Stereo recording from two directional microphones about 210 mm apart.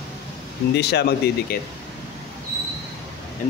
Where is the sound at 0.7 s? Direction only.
50° left (ahead or behind).